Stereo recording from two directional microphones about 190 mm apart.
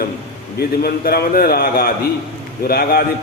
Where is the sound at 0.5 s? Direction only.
55° left (ahead or behind).